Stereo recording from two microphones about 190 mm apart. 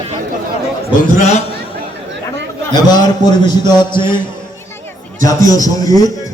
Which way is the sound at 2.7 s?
20° left (ahead or behind).